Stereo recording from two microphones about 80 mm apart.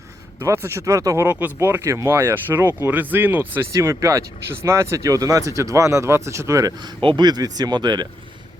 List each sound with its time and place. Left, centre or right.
0.3 s speech: right
1.3 s speech: right
3.8 s speech: right
7.0 s speech: right